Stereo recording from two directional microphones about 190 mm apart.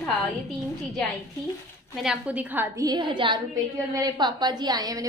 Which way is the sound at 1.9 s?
5° right (ahead or behind).